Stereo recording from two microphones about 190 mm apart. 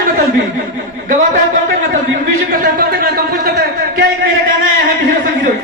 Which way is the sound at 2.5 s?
50° right (ahead or behind).